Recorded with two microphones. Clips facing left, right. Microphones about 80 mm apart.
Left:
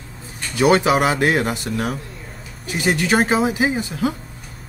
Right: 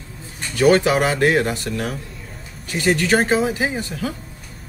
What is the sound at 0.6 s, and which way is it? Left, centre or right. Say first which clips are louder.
Speech: even; centre.